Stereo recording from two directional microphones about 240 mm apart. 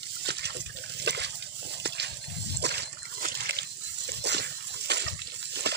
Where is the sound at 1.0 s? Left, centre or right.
Right.